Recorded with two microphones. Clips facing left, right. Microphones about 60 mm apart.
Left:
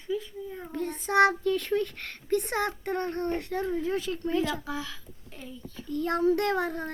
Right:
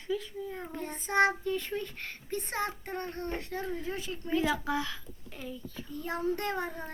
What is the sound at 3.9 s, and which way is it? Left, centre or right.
Speech, left.